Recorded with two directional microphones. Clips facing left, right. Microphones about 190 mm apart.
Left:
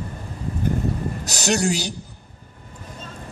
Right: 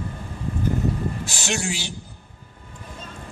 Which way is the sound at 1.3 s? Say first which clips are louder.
Left 6 dB; 40° left (ahead or behind).